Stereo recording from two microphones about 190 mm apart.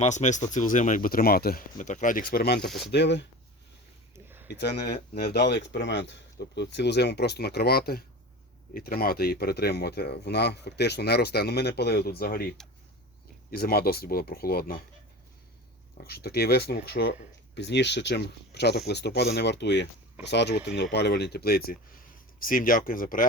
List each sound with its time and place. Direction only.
0.0 s speech: 40° left (ahead or behind); by 2.6 s 55° left (ahead or behind)
2.6 s speech: centre (ahead or behind)
2.9 s speech: 65° left (ahead or behind)
4.1 s a sound: 10° right (ahead or behind)
4.4 s speech: 60° left (ahead or behind)
16.0 s speech: 55° left (ahead or behind)